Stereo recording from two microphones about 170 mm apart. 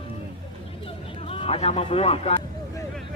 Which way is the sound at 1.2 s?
35° left (ahead or behind).